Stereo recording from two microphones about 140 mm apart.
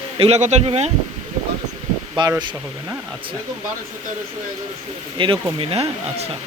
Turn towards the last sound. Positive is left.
turn(degrees=-40)  # may be behind; listen again after turning